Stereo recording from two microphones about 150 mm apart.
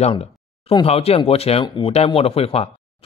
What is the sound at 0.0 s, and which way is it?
Speech, 40° left (ahead or behind).